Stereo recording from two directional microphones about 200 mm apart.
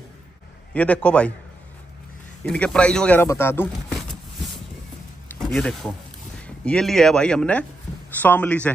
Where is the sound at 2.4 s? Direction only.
5° left (ahead or behind).